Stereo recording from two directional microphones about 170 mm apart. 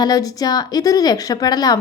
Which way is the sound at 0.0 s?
20° left (ahead or behind).